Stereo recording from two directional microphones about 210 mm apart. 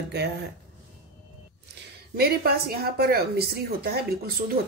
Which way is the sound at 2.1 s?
45° right (ahead or behind).